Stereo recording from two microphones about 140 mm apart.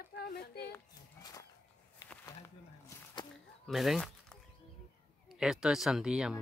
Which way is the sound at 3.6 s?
Centre (ahead or behind).